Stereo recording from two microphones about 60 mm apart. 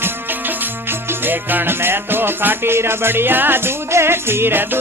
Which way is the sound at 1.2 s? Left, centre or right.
Right.